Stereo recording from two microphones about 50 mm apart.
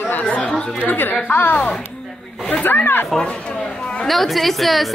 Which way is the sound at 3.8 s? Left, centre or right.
Centre.